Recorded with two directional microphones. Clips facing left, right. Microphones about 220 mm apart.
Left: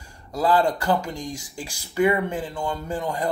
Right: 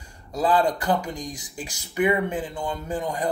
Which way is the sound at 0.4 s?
15° right (ahead or behind).